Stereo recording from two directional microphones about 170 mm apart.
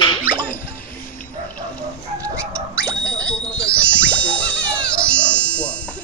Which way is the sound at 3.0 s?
5° left (ahead or behind).